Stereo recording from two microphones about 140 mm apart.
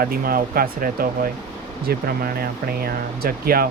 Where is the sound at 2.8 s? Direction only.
90° right.